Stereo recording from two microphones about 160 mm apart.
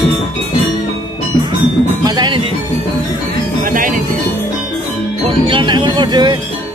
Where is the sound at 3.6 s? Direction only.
55° right (ahead or behind).